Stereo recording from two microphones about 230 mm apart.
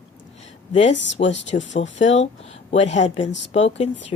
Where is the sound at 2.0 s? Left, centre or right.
Left.